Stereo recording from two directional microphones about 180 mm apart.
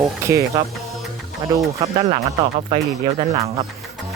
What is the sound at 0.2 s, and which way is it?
Speech, 15° right (ahead or behind).